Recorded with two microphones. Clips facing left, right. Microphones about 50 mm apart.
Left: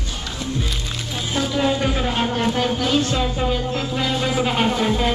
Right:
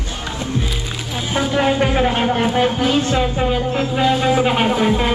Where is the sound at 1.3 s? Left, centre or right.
Right.